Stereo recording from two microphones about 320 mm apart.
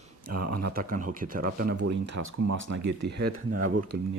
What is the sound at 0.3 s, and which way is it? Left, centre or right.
Speech, right.